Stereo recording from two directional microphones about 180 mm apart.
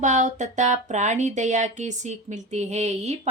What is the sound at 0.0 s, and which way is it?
Speech, 40° right (ahead or behind).